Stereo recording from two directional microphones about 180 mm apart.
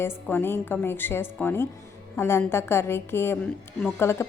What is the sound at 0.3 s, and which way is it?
A woman's voice, 10° left (ahead or behind).